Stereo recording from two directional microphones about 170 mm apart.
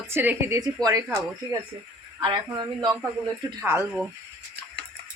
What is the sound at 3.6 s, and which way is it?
Speech, 15° right (ahead or behind).